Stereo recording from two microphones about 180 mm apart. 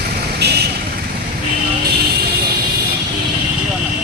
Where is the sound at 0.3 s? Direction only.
65° right (ahead or behind).